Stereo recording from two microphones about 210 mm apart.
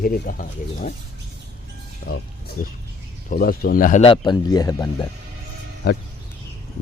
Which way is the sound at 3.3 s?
45° left (ahead or behind).